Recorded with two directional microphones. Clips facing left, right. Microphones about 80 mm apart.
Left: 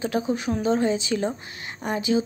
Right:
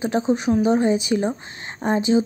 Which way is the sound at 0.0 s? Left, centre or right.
Right.